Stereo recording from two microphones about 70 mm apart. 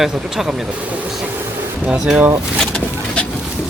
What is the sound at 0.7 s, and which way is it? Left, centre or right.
Speech, right.